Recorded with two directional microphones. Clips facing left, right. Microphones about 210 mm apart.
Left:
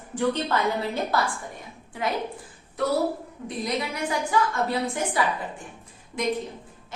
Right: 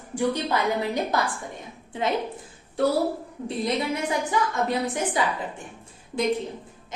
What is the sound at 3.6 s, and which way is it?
A woman's voice, 25° right (ahead or behind).